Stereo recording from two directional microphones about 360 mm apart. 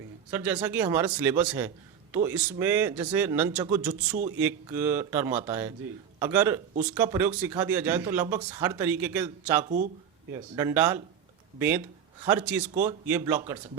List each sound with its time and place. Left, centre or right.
0.3 s speech: centre
9.6 s speech: right
10.5 s speech: centre
12.2 s speech: centre